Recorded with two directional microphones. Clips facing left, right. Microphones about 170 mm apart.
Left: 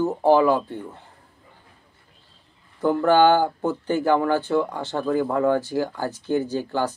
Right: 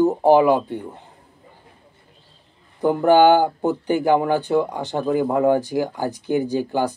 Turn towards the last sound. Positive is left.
turn(degrees=-15)  # may be behind; listen again after turning